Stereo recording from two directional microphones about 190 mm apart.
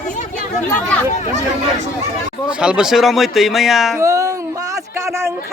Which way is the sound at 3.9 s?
15° right (ahead or behind).